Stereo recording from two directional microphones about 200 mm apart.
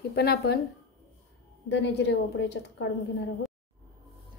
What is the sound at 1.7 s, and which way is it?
A woman's voice, 60° left (ahead or behind).